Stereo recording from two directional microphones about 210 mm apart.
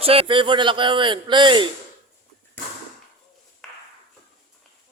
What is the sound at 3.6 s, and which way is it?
Ping, centre (ahead or behind).